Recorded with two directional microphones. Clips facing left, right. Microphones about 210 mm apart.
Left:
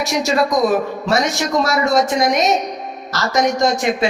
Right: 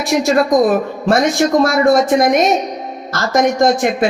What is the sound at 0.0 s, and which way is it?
Speech, 55° right (ahead or behind).